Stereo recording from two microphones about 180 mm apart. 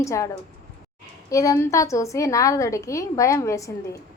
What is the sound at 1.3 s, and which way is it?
A woman's voice, 20° left (ahead or behind).